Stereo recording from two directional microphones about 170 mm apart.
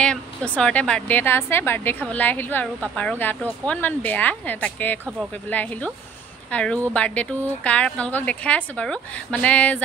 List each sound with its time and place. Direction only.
0.0 s a woman's voice: 5° left (ahead or behind)